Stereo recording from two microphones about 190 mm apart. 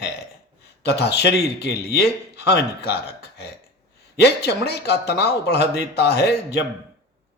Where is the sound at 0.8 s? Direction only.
60° left (ahead or behind).